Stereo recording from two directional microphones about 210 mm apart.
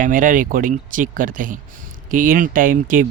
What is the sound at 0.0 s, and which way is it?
A man's voice, 40° right (ahead or behind).